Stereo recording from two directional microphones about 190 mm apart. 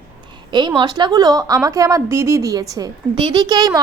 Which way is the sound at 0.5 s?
25° right (ahead or behind).